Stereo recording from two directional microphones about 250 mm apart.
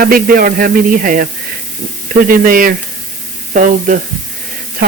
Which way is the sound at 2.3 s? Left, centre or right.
Right.